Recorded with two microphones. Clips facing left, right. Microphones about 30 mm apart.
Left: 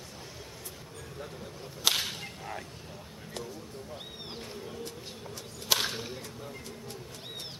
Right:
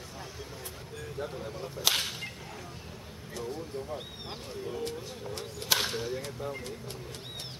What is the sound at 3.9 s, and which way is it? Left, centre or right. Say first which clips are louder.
Speech: right 2 dB; centre.